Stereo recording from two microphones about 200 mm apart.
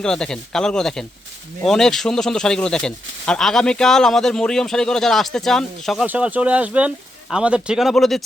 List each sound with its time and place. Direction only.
0.0 s speech: 5° left (ahead or behind)